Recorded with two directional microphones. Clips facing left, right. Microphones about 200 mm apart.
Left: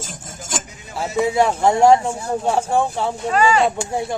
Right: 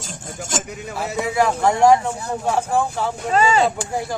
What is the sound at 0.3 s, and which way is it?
Chink, 65° right (ahead or behind).